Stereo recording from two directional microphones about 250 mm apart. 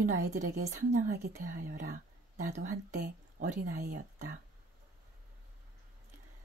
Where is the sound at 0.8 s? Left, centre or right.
Right.